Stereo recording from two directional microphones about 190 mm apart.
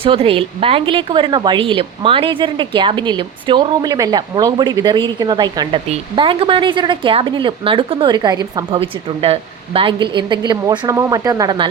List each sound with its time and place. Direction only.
0.0 s speech: 30° right (ahead or behind)